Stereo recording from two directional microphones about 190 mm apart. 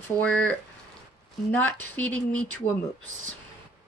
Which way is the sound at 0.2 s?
5° left (ahead or behind).